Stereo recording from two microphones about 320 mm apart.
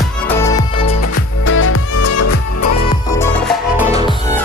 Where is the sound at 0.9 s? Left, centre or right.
Left.